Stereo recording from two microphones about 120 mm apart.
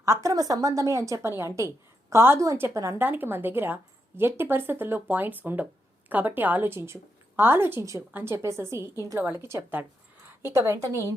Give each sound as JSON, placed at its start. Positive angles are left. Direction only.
{"t": 0.0, "sound": "a woman's voice", "side_deg": -25}